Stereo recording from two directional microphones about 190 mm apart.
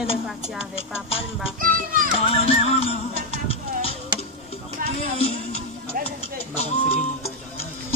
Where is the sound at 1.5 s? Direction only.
50° right (ahead or behind).